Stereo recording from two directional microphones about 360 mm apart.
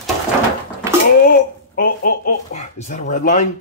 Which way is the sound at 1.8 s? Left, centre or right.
Left.